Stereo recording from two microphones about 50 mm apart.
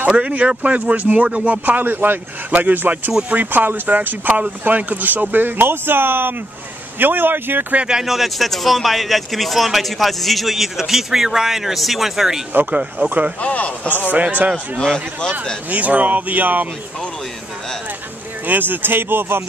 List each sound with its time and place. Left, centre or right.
0.1 s a man's voice: right
7.9 s speech: centre
13.0 s a man's voice: right
13.4 s a man's voice: left
14.1 s a man's voice: right
14.8 s a man's voice: centre
15.7 s a man's voice: right
18.4 s speech: right